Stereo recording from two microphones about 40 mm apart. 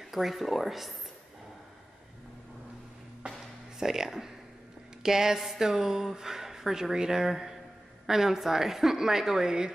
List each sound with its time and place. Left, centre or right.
0.0 s speech: centre
3.2 s music: right
3.8 s speech: centre